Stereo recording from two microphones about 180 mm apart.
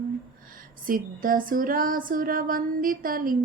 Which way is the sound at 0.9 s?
50° right (ahead or behind).